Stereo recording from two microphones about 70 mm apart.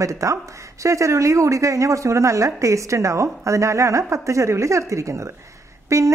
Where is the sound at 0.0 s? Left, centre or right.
Right.